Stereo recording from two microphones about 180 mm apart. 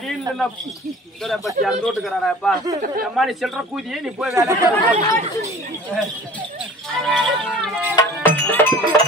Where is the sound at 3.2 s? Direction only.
Centre (ahead or behind).